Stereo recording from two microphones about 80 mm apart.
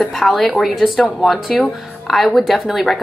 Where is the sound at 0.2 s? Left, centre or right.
Centre.